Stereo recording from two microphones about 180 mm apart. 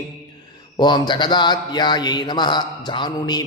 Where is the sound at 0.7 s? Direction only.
25° left (ahead or behind).